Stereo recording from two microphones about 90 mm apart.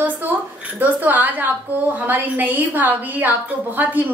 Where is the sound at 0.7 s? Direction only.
20° right (ahead or behind).